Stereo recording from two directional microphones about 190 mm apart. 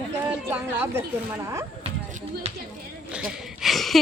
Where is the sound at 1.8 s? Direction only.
35° right (ahead or behind).